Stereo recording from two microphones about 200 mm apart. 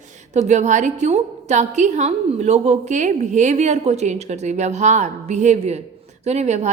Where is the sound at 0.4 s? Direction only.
35° right (ahead or behind).